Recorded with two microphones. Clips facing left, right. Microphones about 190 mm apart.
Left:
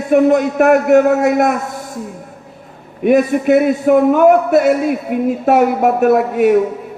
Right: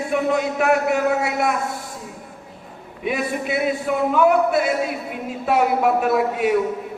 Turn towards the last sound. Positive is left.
turn(degrees=45)  # may be behind; listen again after turning